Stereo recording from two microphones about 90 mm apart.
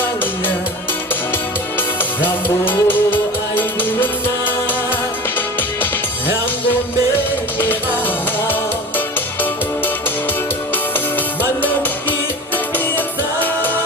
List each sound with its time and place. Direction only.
2.2 s music: 20° left (ahead or behind)